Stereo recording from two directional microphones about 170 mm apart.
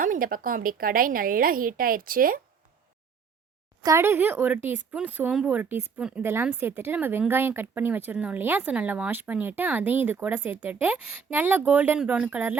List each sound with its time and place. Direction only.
0.0 s a woman's voice: 55° right (ahead or behind)
3.8 s speech: 15° right (ahead or behind)